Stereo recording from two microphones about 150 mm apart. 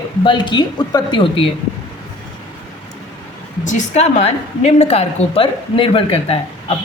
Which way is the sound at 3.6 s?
50° left (ahead or behind).